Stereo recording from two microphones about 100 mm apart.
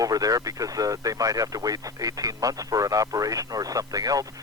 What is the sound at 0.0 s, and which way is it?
Speech, 35° right (ahead or behind).